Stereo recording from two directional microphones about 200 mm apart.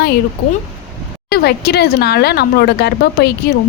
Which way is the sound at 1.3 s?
55° left (ahead or behind).